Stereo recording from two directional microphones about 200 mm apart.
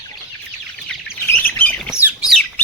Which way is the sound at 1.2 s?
10° left (ahead or behind).